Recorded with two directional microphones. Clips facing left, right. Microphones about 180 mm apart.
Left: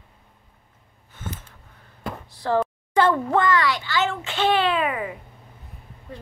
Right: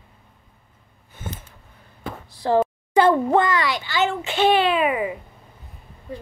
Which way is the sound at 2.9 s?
15° right (ahead or behind).